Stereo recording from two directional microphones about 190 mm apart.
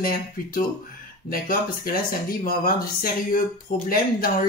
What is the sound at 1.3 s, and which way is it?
Speech, 50° left (ahead or behind).